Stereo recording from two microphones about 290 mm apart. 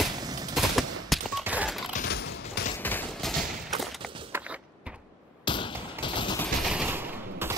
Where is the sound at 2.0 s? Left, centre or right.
Left.